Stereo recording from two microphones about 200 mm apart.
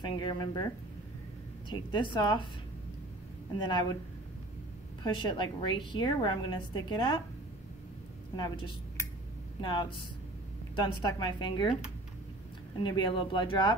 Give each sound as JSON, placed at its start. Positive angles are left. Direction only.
{"t": 0.0, "sound": "a woman's voice", "side_deg": 25}
{"t": 1.7, "sound": "a woman's voice", "side_deg": 25}
{"t": 3.5, "sound": "a woman's voice", "side_deg": 20}
{"t": 5.0, "sound": "a woman's voice", "side_deg": 25}
{"t": 9.6, "sound": "a woman's voice", "side_deg": 25}
{"t": 12.7, "sound": "a woman's voice", "side_deg": 25}